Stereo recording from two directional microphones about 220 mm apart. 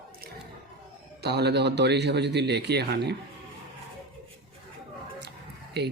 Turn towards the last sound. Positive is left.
turn(degrees=-50)  # may be behind; listen again after turning